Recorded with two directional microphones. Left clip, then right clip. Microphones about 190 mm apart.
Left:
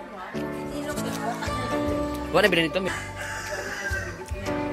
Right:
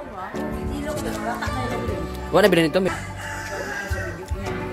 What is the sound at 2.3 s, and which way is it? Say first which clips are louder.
Speech: right 4 dB; 20° right (ahead or behind).